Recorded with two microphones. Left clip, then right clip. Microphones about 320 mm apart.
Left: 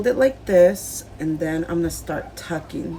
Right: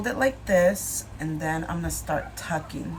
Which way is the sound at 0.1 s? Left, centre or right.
Centre.